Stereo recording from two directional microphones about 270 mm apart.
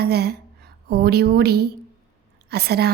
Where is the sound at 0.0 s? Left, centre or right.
Right.